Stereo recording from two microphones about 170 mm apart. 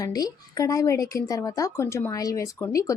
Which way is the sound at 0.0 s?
20° left (ahead or behind).